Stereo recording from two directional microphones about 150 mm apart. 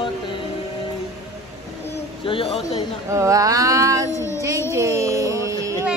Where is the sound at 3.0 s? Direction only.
20° right (ahead or behind).